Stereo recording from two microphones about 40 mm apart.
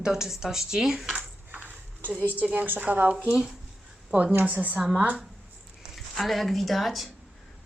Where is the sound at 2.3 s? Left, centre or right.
Right.